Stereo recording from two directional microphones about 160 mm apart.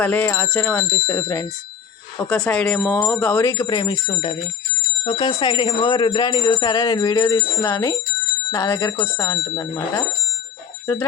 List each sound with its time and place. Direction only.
0.0 s speech: 10° left (ahead or behind)
2.1 s speech: 5° left (ahead or behind); by 10.0 s 20° left (ahead or behind)